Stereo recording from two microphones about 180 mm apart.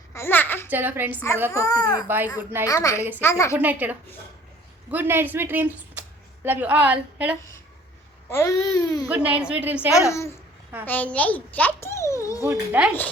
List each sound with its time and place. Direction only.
0.1 s a sound: 15° left (ahead or behind)
0.7 s a woman's voice: 10° right (ahead or behind)
1.5 s speech: 20° left (ahead or behind)
2.0 s a woman's voice: 10° right (ahead or behind)
2.6 s speech: 15° left (ahead or behind)
3.6 s a woman's voice: 10° right (ahead or behind)
8.3 s speech: 15° left (ahead or behind)
9.0 s a woman's voice: 10° right (ahead or behind)
10.8 s a child's voice: 10° left (ahead or behind)
12.4 s a woman's voice: 10° right (ahead or behind)